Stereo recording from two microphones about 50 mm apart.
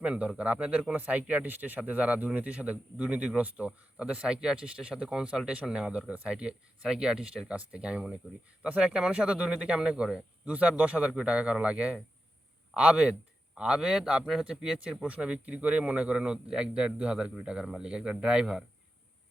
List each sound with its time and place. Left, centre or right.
0.0 s speech: right